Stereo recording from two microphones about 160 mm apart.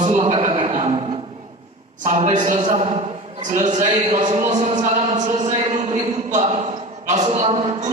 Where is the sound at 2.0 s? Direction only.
50° right (ahead or behind).